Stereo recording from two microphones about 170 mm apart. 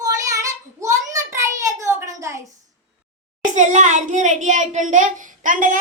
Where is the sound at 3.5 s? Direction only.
45° right (ahead or behind).